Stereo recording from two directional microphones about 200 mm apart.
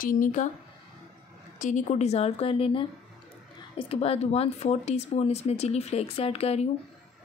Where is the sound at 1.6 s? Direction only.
35° left (ahead or behind).